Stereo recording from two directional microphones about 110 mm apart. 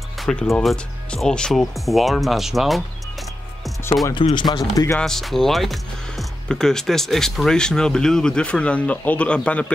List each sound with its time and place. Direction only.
0.2 s speech: 5° left (ahead or behind)
4.1 s speech: 50° left (ahead or behind)
4.5 s speech: 35° left (ahead or behind)
4.9 s speech: 5° left (ahead or behind)